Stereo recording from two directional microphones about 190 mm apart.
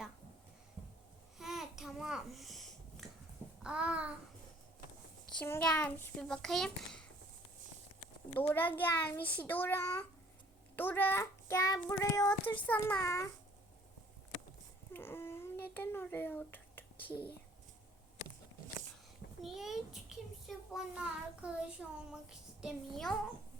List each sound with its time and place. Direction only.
1.4 s babbling: centre (ahead or behind)
3.6 s child singing: 5° right (ahead or behind)
5.4 s a child's voice: 5° left (ahead or behind)
8.4 s child singing: 10° left (ahead or behind)
12.6 s child singing: 10° left (ahead or behind)
14.9 s a sound: 10° left (ahead or behind)
19.4 s a child's voice: centre (ahead or behind)